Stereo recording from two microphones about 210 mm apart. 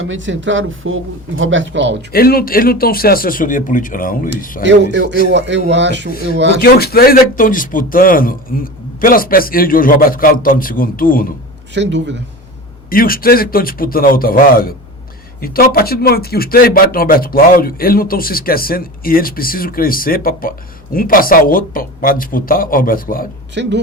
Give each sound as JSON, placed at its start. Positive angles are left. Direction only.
{"t": 0.0, "sound": "speech", "side_deg": -65}
{"t": 2.1, "sound": "speech", "side_deg": 45}
{"t": 4.6, "sound": "speech", "side_deg": -55}
{"t": 6.6, "sound": "speech", "side_deg": 45}
{"t": 11.7, "sound": "speech", "side_deg": -55}
{"t": 12.9, "sound": "speech", "side_deg": 45}
{"t": 23.6, "sound": "speech", "side_deg": -55}